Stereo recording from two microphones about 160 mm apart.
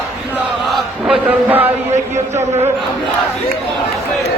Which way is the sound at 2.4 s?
45° right (ahead or behind).